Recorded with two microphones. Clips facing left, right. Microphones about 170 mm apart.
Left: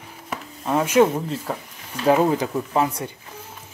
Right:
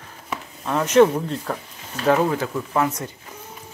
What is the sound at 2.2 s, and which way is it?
Speech, 20° left (ahead or behind).